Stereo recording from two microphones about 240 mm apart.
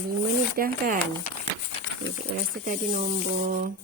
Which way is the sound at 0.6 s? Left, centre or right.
Right.